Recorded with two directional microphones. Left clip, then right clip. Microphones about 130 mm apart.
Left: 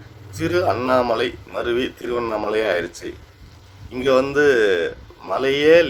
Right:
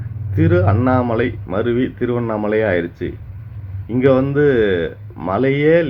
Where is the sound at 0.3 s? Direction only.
25° left (ahead or behind).